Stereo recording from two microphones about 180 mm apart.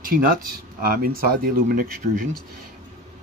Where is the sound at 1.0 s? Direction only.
55° right (ahead or behind).